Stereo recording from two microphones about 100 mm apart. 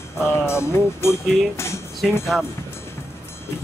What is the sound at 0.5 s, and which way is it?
Speech, 25° left (ahead or behind).